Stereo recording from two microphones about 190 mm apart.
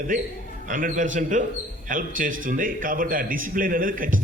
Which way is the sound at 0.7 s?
45° right (ahead or behind).